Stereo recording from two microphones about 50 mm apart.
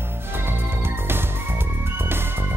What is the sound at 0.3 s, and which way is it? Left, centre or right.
Music, right.